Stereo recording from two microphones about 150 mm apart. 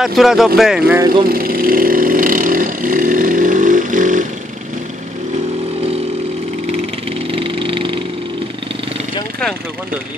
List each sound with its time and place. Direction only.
0.0 s speech: centre (ahead or behind)
0.9 s speech: 25° right (ahead or behind)
1.2 s vehicle: 75° right (ahead or behind); by 4.3 s 60° right (ahead or behind)
7.2 s a sound: 35° right (ahead or behind)